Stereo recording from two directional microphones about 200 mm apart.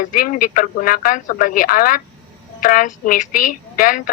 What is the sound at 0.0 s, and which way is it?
A woman's voice, 40° left (ahead or behind).